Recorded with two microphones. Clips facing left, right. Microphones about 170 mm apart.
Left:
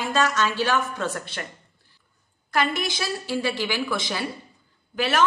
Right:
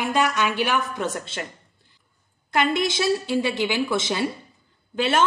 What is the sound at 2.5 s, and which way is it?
A woman's voice, 20° right (ahead or behind).